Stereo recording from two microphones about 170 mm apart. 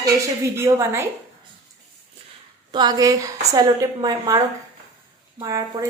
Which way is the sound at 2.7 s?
25° right (ahead or behind).